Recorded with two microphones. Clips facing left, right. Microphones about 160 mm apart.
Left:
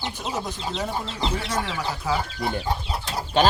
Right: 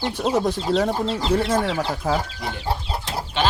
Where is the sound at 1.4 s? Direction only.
50° right (ahead or behind).